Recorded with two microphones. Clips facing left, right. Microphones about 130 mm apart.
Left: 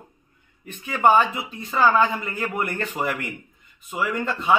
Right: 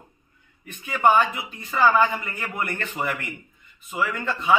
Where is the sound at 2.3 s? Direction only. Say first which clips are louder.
Left 3 dB; 15° left (ahead or behind).